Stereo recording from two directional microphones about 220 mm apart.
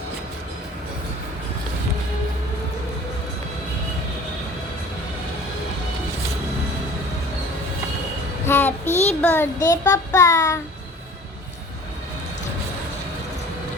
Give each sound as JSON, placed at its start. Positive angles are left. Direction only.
{"t": 8.4, "sound": "child singing", "side_deg": 10}
{"t": 8.9, "sound": "child singing", "side_deg": 30}
{"t": 9.2, "sound": "child singing", "side_deg": 10}